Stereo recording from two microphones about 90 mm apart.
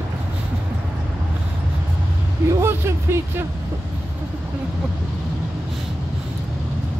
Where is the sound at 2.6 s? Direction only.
25° right (ahead or behind).